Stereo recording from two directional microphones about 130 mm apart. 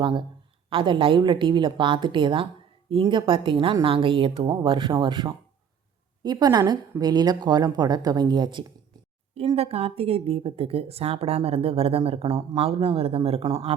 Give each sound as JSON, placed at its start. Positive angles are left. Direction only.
{"t": 0.0, "sound": "a woman's voice", "side_deg": -40}
{"t": 9.6, "sound": "a woman's voice", "side_deg": -50}